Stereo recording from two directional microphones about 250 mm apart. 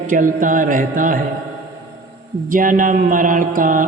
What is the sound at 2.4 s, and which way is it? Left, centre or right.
Speech, right.